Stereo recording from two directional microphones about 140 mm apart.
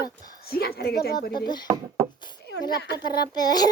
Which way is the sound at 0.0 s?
30° left (ahead or behind).